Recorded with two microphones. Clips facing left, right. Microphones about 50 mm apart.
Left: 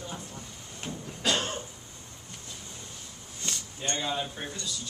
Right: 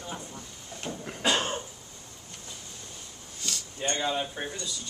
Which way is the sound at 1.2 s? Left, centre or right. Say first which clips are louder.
Right 2 dB; centre.